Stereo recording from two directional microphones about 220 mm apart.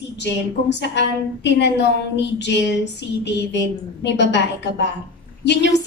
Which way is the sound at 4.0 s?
50° left (ahead or behind).